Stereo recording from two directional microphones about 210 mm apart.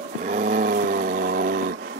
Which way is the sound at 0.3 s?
40° right (ahead or behind).